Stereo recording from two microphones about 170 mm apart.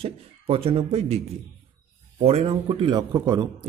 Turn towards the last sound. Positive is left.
turn(degrees=-20)  # may be behind; listen again after turning